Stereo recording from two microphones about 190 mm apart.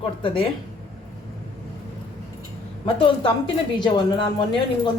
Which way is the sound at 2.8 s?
25° left (ahead or behind).